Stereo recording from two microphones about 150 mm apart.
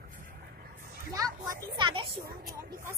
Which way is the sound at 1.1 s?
25° right (ahead or behind).